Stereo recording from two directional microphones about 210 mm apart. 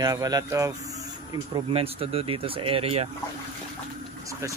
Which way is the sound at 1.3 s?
25° right (ahead or behind).